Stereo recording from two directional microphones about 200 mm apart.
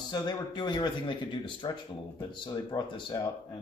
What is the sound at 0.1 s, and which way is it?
Speech, 20° left (ahead or behind).